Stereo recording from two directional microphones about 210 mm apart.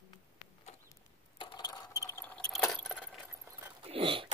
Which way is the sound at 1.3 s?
20° left (ahead or behind).